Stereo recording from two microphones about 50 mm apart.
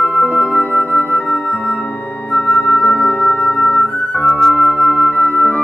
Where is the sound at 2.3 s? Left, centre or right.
Left.